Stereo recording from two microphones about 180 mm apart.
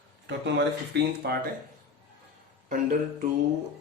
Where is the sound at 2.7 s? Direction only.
45° right (ahead or behind).